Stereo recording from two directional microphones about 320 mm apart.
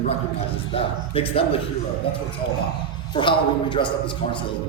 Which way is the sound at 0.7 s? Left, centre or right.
Centre.